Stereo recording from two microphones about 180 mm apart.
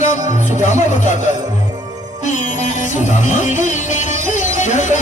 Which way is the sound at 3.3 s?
40° left (ahead or behind).